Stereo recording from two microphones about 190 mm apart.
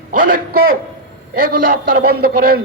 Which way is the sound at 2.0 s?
55° right (ahead or behind).